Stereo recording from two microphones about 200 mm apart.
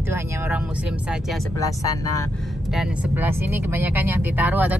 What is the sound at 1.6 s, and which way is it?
Speech, 15° left (ahead or behind).